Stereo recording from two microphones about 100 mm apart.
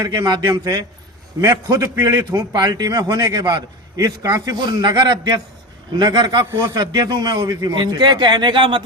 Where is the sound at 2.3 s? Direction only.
45° right (ahead or behind).